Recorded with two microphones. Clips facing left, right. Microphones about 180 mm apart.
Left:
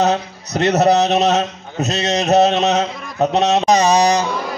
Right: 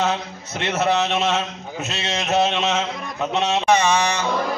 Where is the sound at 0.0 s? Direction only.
40° left (ahead or behind).